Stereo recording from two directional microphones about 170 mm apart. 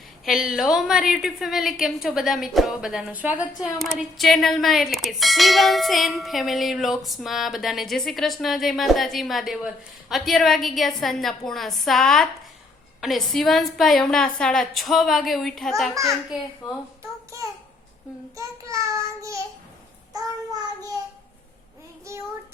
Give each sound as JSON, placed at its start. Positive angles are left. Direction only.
{"t": 0.3, "sound": "a woman's voice", "side_deg": 0}
{"t": 17.0, "sound": "a sound", "side_deg": -20}
{"t": 18.3, "sound": "child singing", "side_deg": -20}
{"t": 22.1, "sound": "child singing", "side_deg": -15}